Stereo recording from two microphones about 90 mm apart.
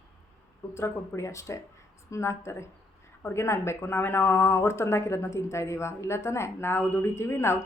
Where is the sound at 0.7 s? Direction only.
30° left (ahead or behind).